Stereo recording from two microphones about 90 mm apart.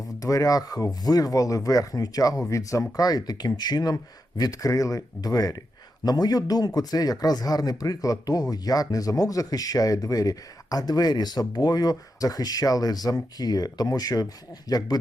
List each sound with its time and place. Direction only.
0.2 s speech: 40° left (ahead or behind)